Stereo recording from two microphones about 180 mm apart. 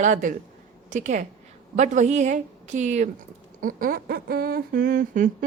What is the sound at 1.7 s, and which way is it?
A woman's voice, 40° right (ahead or behind).